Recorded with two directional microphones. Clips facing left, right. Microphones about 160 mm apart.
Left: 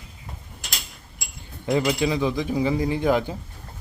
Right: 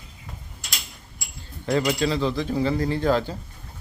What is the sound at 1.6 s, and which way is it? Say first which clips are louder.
Speech: left 1 dB; 15° left (ahead or behind).